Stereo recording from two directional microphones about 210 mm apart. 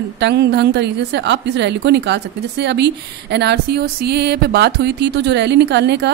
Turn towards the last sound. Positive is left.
turn(degrees=-55)  # may be behind; listen again after turning